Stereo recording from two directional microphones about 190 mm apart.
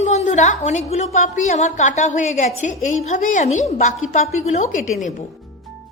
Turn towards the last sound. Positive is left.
turn(degrees=40)  # may be behind; listen again after turning